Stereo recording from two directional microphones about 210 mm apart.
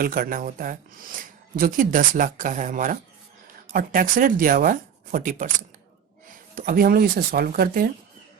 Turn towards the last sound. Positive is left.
turn(degrees=-45)  # may be behind; listen again after turning